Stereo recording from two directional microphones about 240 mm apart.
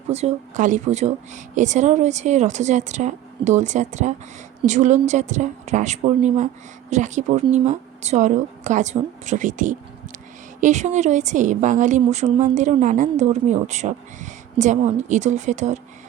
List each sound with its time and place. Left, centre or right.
0.1 s a woman's voice: right